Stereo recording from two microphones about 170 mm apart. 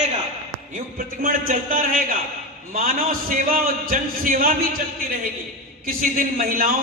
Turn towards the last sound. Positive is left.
turn(degrees=-60)  # may be behind; listen again after turning